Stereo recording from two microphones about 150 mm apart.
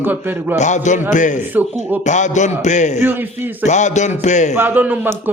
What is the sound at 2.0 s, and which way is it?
A man's voice, 55° left (ahead or behind).